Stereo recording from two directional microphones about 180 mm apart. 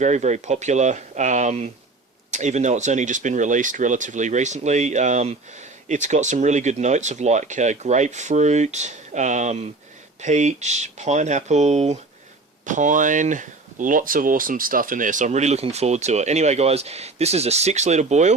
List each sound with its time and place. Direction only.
0.0 s speech: 40° right (ahead or behind)